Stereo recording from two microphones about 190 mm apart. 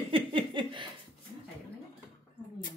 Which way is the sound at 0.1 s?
25° right (ahead or behind).